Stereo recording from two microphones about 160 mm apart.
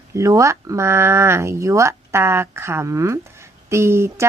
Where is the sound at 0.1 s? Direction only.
20° right (ahead or behind).